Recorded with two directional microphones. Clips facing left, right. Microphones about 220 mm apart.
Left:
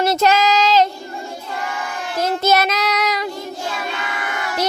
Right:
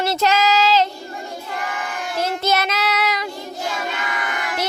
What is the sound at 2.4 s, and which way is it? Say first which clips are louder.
Child singing: left 5 dB; 45° left (ahead or behind).